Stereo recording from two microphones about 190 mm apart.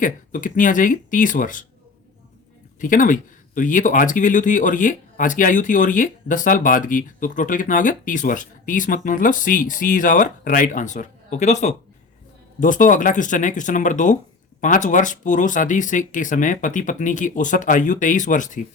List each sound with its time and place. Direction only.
0.0 s speech: 45° left (ahead or behind)
2.8 s speech: 45° left (ahead or behind)